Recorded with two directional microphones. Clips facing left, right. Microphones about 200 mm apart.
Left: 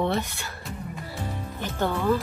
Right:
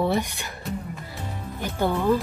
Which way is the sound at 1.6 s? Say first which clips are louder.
Right 2 dB; 10° right (ahead or behind).